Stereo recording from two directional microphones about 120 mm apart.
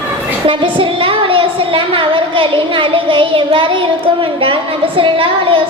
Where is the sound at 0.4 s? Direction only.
45° right (ahead or behind).